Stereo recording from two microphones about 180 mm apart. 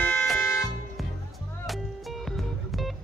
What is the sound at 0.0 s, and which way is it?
Music, 5° left (ahead or behind).